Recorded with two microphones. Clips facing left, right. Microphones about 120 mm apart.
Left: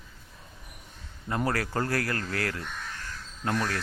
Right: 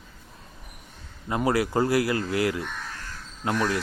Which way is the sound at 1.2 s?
15° right (ahead or behind).